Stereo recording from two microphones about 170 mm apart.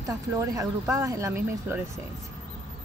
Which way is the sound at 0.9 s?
20° right (ahead or behind).